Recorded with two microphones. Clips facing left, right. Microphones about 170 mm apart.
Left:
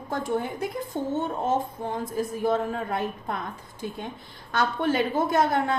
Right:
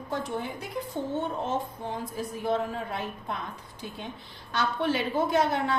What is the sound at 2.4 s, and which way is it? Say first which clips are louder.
Speech: left 2 dB; 50° left (ahead or behind).